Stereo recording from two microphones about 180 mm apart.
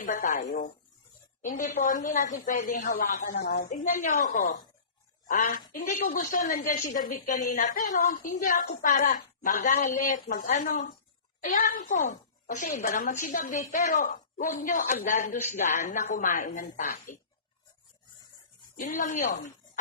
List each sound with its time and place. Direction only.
0.0 s a woman's voice: 45° left (ahead or behind)
1.5 s a woman's voice: 45° left (ahead or behind)
18.8 s speech: 45° left (ahead or behind)